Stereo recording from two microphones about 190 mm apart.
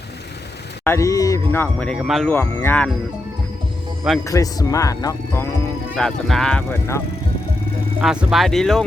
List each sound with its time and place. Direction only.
0.9 s speech: 15° left (ahead or behind); by 2.3 s centre (ahead or behind)
2.3 s speech: 10° left (ahead or behind)
4.2 s speech: 15° left (ahead or behind)
6.0 s speech: centre (ahead or behind)
8.0 s speech: 5° right (ahead or behind)